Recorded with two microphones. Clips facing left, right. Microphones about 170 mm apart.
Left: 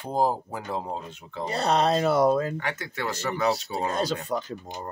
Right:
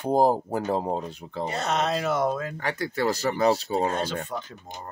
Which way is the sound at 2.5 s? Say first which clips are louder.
Right 4 dB; 35° right (ahead or behind).